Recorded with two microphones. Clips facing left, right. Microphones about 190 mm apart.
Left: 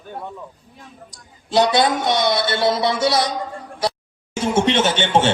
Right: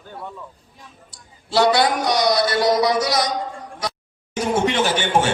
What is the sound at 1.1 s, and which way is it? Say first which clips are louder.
A man's voice: left 2 dB; 20° left (ahead or behind).